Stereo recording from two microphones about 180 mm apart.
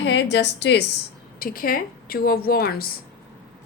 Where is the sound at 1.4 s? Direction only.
55° left (ahead or behind).